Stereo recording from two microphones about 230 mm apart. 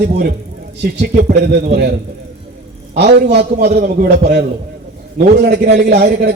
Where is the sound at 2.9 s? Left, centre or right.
Right.